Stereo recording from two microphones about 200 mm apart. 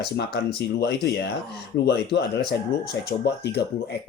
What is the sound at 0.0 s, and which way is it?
Speech, 55° left (ahead or behind).